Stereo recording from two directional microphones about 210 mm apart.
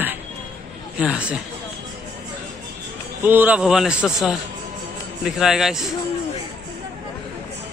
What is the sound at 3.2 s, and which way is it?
Speech, 10° right (ahead or behind).